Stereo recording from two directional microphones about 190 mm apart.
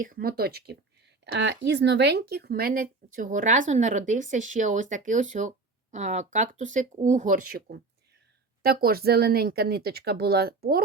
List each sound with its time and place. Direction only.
0.0 s speech: 50° right (ahead or behind)
1.2 s speech: 65° right (ahead or behind)